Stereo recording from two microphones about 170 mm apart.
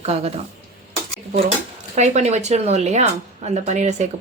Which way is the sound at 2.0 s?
40° right (ahead or behind).